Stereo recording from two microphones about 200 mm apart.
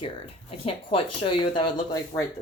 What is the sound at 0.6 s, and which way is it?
Speech, 25° left (ahead or behind).